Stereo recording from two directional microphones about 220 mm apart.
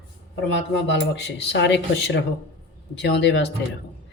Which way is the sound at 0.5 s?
55° left (ahead or behind).